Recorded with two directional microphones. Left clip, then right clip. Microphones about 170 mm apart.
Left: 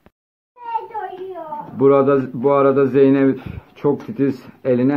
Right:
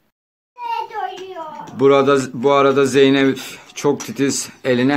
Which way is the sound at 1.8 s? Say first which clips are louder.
Right 1 dB; 15° right (ahead or behind).